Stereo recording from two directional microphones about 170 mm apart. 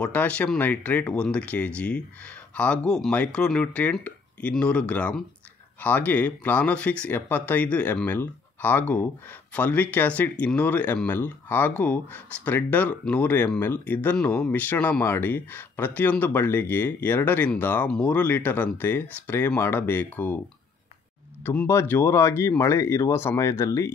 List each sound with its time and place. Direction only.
0.0 s speech: 10° left (ahead or behind)
21.5 s speech: 10° left (ahead or behind)